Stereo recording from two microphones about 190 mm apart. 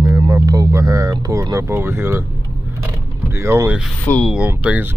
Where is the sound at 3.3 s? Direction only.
15° right (ahead or behind).